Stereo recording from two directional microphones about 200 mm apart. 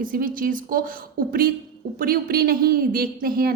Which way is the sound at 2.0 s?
50° right (ahead or behind).